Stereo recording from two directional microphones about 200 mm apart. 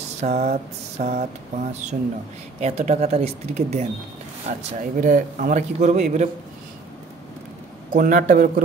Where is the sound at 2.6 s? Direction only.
35° right (ahead or behind).